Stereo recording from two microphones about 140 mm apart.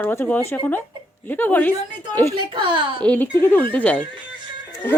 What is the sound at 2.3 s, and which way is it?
Speech, 35° right (ahead or behind).